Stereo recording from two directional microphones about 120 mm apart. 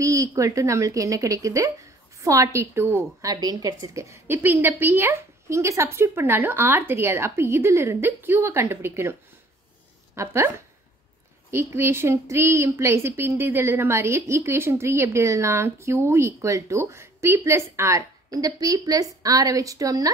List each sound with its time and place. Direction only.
0.0 s a woman's voice: 30° right (ahead or behind)
10.1 s a woman's voice: 20° right (ahead or behind)
11.5 s a woman's voice: 20° right (ahead or behind)